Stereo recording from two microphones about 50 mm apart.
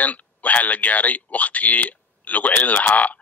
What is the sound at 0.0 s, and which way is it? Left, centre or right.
Speech, left.